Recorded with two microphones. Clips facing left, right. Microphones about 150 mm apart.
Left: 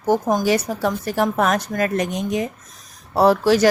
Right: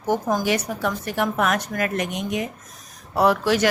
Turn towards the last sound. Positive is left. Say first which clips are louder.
# left 4 dB
turn(degrees=35)  # may be behind; listen again after turning